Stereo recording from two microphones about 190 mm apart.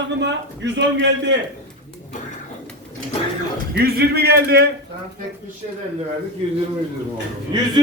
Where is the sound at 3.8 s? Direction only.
55° right (ahead or behind).